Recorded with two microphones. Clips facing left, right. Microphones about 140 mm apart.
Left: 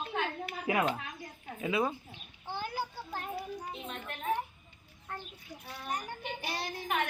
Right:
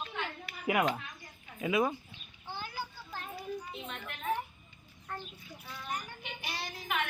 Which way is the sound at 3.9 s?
35° left (ahead or behind).